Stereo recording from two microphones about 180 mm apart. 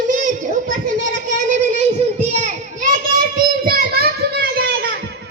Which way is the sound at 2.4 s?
45° right (ahead or behind).